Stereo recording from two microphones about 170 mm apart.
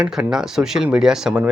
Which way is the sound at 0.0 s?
5° right (ahead or behind).